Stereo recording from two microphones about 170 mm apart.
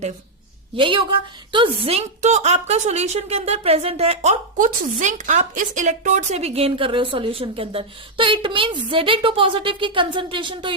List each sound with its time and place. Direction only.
0.8 s a woman's voice: 30° right (ahead or behind)